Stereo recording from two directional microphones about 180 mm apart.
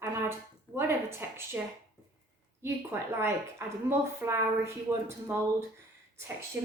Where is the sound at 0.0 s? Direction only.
15° right (ahead or behind).